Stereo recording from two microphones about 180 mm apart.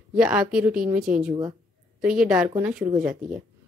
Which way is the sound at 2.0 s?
5° right (ahead or behind).